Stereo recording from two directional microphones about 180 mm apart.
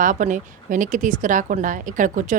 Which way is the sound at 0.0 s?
45° right (ahead or behind).